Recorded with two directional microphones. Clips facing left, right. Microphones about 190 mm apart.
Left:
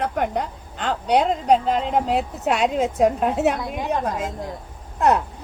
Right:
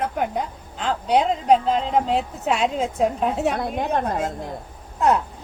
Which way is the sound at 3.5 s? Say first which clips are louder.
Right 2 dB; 55° right (ahead or behind).